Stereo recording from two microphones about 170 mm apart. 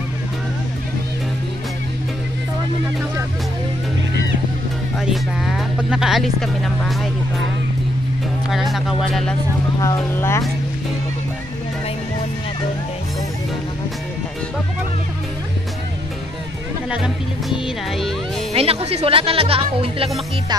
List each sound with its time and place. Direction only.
4.9 s speech: centre (ahead or behind)
8.5 s speech: centre (ahead or behind)
9.8 s speech: 20° left (ahead or behind)
16.9 s speech: 5° right (ahead or behind)
18.5 s speech: 35° right (ahead or behind)